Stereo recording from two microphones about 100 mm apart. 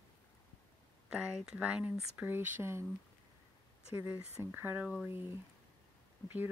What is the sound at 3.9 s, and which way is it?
Speech, 20° right (ahead or behind).